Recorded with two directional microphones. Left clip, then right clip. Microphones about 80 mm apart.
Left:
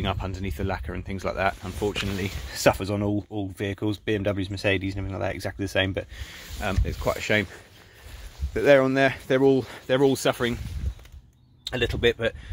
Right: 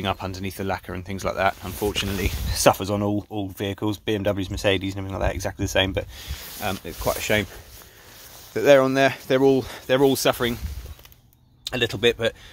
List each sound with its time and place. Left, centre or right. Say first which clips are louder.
0.0 s speech: right 3 dB; right; by 7.4 s centre
8.5 s speech: right 2 dB; right
11.6 s speech: right 2 dB; centre